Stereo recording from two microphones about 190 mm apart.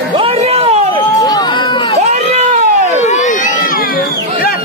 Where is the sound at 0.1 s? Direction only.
30° right (ahead or behind).